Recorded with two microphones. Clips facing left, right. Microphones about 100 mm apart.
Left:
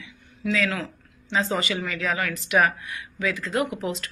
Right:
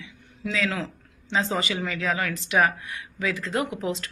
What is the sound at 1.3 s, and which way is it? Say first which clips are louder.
Speech: left 1 dB; 25° right (ahead or behind).